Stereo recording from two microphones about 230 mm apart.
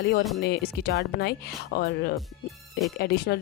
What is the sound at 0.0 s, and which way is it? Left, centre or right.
Speech, left.